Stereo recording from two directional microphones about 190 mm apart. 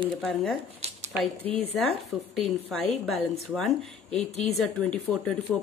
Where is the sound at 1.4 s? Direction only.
30° right (ahead or behind).